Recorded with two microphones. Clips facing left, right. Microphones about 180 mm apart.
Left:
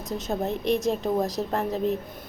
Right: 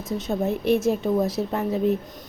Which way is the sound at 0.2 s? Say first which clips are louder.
Right 3 dB; centre (ahead or behind).